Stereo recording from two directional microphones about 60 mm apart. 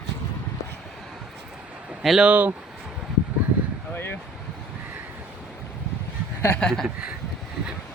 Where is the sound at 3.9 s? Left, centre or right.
Left.